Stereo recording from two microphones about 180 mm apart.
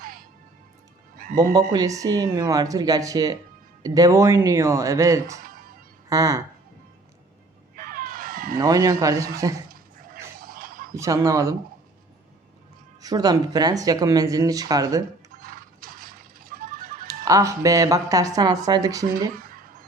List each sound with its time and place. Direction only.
0.0 s music: 50° right (ahead or behind)
1.7 s speech: 20° right (ahead or behind)
5.5 s music: 55° right (ahead or behind)
6.1 s speech: 20° right (ahead or behind)
7.8 s crow: 50° right (ahead or behind)
8.5 s speech: 20° right (ahead or behind)
10.4 s a sound: 55° right (ahead or behind)
10.9 s speech: 15° right (ahead or behind)
13.0 s speech: 20° right (ahead or behind)
15.4 s fowl: 50° right (ahead or behind)
17.2 s speech: 20° right (ahead or behind)
19.4 s music: 50° right (ahead or behind)